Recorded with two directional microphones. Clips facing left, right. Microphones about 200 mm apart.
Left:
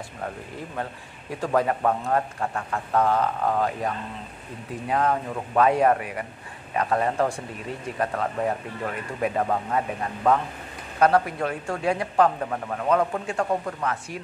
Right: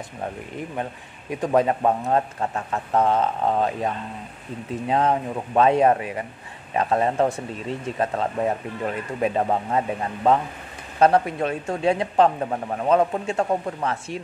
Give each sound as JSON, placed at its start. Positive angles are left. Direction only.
{"t": 1.3, "sound": "speech", "side_deg": -20}
{"t": 8.8, "sound": "speech", "side_deg": -25}